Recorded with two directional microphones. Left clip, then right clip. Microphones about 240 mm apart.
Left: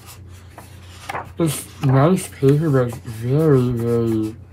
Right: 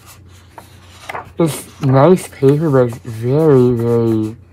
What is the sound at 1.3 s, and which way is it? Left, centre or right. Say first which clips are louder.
Speech: right 8 dB; right.